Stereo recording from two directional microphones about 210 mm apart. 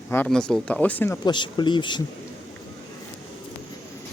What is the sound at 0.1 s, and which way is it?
Speech, 5° left (ahead or behind).